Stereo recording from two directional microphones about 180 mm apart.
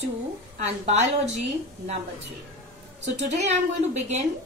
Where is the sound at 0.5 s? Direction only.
40° right (ahead or behind).